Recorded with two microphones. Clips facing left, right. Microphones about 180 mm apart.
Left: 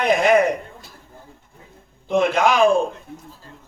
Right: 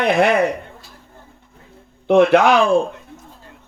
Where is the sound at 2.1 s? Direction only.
65° right (ahead or behind).